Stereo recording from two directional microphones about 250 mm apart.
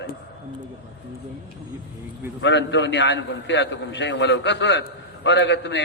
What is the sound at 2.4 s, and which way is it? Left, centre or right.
A man's voice, left.